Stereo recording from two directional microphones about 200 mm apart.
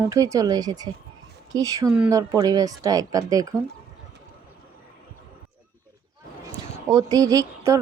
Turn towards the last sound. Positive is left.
turn(degrees=-15)  # may be behind; listen again after turning